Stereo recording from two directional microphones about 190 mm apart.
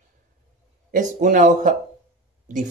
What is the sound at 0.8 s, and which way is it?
Speech, 40° right (ahead or behind).